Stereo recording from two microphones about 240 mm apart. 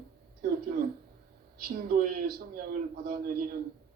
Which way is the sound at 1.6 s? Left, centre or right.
Right.